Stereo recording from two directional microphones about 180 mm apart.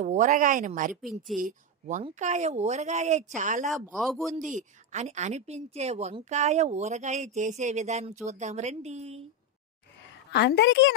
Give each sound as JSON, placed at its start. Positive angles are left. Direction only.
{"t": 0.0, "sound": "speech", "side_deg": -40}
{"t": 1.0, "sound": "a man's voice", "side_deg": 0}
{"t": 1.4, "sound": "a woman's voice", "side_deg": -45}
{"t": 3.8, "sound": "a man's voice", "side_deg": 0}
{"t": 4.6, "sound": "a woman's voice", "side_deg": -40}
{"t": 10.3, "sound": "a woman's voice", "side_deg": 70}